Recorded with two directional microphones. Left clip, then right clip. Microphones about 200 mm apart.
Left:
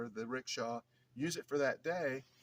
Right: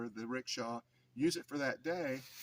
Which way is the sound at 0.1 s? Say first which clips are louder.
Even; 20° left (ahead or behind).